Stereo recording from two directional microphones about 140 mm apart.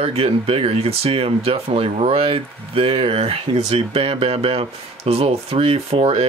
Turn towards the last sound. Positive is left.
turn(degrees=-45)  # may be behind; listen again after turning